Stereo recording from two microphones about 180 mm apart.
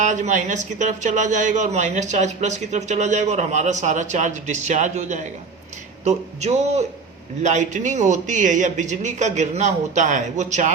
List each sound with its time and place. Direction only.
0.0 s a man's voice: 40° right (ahead or behind)